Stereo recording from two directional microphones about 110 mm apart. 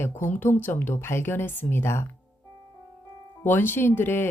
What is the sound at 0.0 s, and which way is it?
Speech, 20° left (ahead or behind).